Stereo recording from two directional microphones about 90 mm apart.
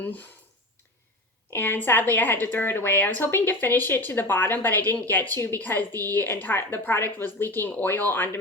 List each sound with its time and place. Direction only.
0.0 s speech: 20° left (ahead or behind)
1.5 s speech: 25° left (ahead or behind)